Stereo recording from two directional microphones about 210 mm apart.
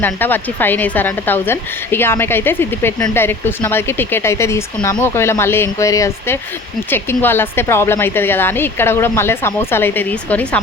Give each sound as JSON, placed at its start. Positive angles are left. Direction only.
{"t": 0.0, "sound": "a woman's voice", "side_deg": 10}